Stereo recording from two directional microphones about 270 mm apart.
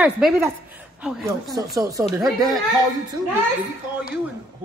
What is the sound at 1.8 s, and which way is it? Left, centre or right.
Speech, centre.